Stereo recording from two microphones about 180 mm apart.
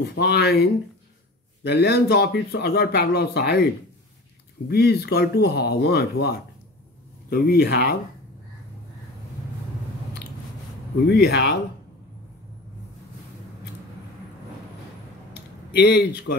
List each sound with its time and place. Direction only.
0.0 s speech: 65° left (ahead or behind)
4.6 s speech: 60° left (ahead or behind)
11.1 s speech: 60° left (ahead or behind)
15.7 s speech: 70° left (ahead or behind)